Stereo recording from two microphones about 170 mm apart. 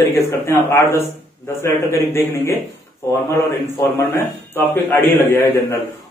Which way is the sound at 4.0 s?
15° left (ahead or behind).